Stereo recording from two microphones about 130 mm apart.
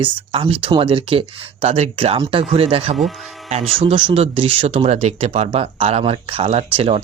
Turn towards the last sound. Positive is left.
turn(degrees=-45)  # may be behind; listen again after turning